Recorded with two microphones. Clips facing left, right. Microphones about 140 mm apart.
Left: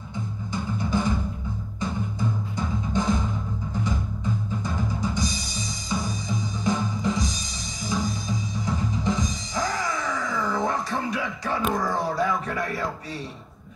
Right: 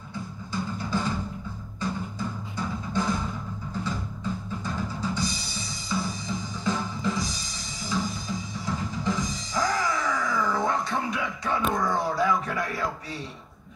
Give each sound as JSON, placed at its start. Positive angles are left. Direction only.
{"t": 0.5, "sound": "music", "side_deg": 15}
{"t": 4.6, "sound": "music", "side_deg": 15}
{"t": 11.8, "sound": "a sound", "side_deg": 25}